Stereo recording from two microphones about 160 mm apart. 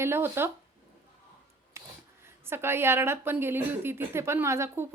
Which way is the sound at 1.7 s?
15° right (ahead or behind).